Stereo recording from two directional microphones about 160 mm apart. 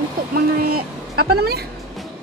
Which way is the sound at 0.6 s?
70° right (ahead or behind).